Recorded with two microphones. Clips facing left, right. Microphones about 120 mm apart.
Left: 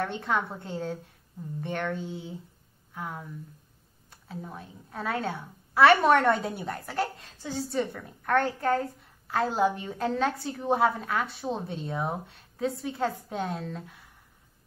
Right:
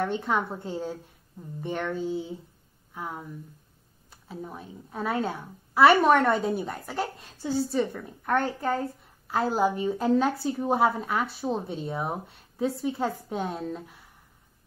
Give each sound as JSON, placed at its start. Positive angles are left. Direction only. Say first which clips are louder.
{"t": 0.0, "sound": "a woman's voice", "louder": "right 2 dB", "side_deg": -5}
{"t": 2.9, "sound": "a sound", "louder": "right 1 dB", "side_deg": -10}
{"t": 4.1, "sound": "a woman's voice", "louder": "right 2 dB", "side_deg": -5}